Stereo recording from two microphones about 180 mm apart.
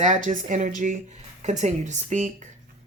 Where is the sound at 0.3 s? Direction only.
45° right (ahead or behind).